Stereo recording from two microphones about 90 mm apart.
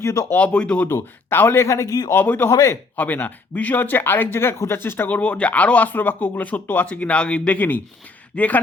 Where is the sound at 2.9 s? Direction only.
20° left (ahead or behind).